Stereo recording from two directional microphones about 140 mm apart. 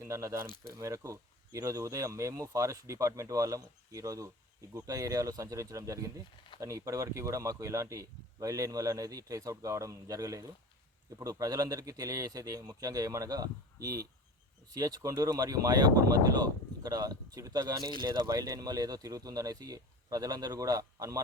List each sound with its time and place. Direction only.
0.0 s speech: 20° right (ahead or behind)
0.4 s speech: 30° left (ahead or behind)
0.8 s speech: 25° right (ahead or behind)
14.7 s speech: 25° right (ahead or behind)